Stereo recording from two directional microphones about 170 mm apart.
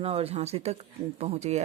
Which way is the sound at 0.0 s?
35° right (ahead or behind).